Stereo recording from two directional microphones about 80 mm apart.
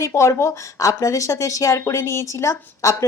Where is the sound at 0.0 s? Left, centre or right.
Left.